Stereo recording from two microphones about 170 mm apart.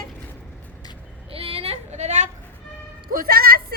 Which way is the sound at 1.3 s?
35° right (ahead or behind).